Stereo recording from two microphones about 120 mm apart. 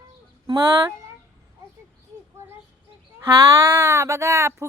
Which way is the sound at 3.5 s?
20° right (ahead or behind).